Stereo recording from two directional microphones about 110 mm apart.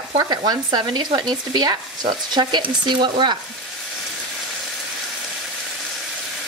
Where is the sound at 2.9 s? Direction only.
45° right (ahead or behind).